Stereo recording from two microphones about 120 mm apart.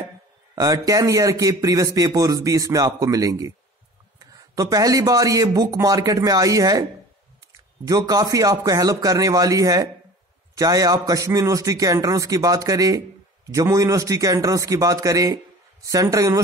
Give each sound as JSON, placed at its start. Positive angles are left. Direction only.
{"t": 0.6, "sound": "speech", "side_deg": -30}